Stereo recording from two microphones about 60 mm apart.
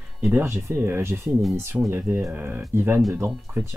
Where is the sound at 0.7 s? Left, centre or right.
Right.